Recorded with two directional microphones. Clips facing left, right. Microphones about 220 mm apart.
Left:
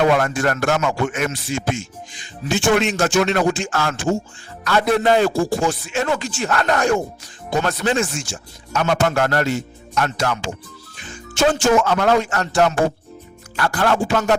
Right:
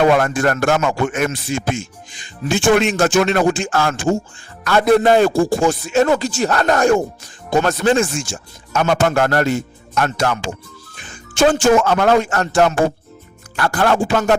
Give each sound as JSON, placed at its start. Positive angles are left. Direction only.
{"t": 0.0, "sound": "speech", "side_deg": -50}